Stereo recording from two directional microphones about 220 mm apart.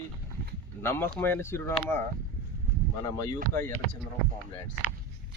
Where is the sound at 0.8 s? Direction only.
10° left (ahead or behind).